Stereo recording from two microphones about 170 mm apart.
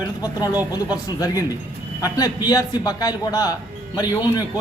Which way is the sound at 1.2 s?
20° left (ahead or behind).